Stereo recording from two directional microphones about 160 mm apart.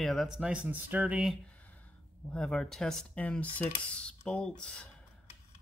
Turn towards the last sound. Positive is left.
turn(degrees=5)  # may be behind; listen again after turning